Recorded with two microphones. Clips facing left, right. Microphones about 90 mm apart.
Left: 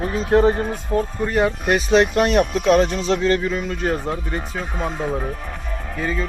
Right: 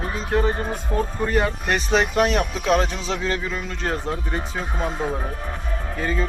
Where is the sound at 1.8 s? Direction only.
Centre (ahead or behind).